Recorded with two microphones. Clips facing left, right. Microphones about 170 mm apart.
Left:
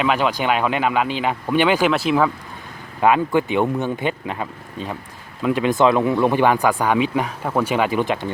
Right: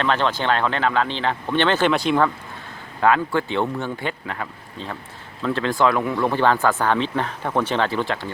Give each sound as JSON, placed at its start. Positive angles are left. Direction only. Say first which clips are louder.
{"t": 0.0, "sound": "speech", "louder": "left 2 dB", "side_deg": 10}
{"t": 3.0, "sound": "speech", "louder": "left 2 dB", "side_deg": 15}